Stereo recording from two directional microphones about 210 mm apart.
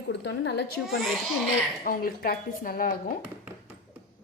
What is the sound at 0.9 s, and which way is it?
Speech, centre (ahead or behind).